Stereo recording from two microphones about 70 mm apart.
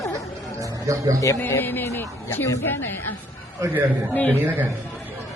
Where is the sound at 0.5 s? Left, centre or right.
Right.